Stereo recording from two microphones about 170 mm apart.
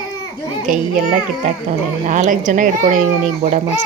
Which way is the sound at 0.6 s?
50° right (ahead or behind).